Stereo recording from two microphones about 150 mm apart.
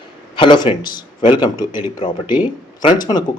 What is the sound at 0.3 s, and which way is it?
Speech, 30° left (ahead or behind).